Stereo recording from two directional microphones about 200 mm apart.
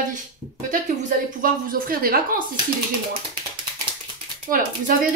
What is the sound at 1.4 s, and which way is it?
A woman's voice, 45° right (ahead or behind).